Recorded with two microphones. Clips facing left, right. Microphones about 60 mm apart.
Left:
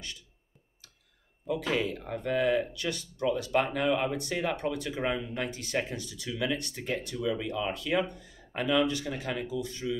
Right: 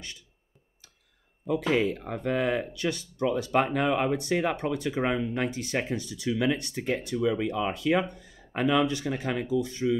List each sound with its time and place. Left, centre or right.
1.5 s speech: right